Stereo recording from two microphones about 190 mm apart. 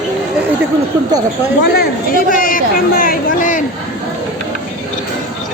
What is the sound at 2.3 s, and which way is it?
Speech, 45° left (ahead or behind).